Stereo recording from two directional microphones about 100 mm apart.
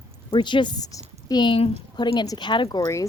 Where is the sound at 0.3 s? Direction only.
50° left (ahead or behind).